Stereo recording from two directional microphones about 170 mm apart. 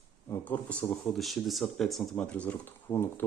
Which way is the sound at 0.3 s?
15° left (ahead or behind).